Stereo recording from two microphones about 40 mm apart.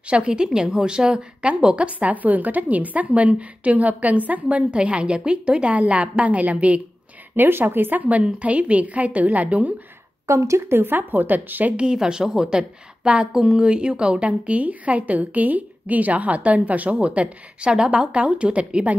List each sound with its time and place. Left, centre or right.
0.1 s a woman's voice: right
4.6 s a woman's voice: right
7.3 s speech: right
8.2 s a woman's voice: right
10.7 s speech: right
11.7 s a woman's voice: right